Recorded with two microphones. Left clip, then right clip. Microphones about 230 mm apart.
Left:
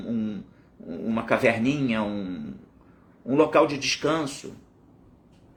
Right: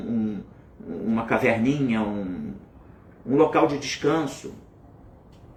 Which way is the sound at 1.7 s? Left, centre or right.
Centre.